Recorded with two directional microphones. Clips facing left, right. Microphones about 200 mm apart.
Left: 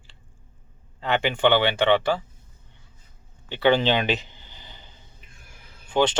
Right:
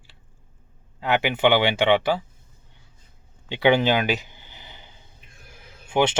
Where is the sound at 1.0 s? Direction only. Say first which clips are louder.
Right 1 dB; 5° right (ahead or behind).